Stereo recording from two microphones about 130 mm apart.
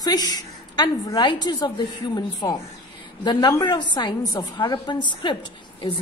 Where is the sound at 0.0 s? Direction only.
30° left (ahead or behind).